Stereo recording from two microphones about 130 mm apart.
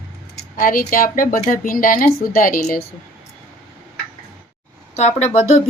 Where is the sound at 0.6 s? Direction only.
90° left.